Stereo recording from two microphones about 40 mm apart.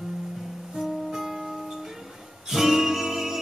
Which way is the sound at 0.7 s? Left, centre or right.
Centre.